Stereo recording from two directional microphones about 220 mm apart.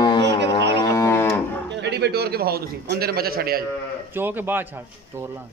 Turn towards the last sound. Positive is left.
turn(degrees=-10)  # may be behind; listen again after turning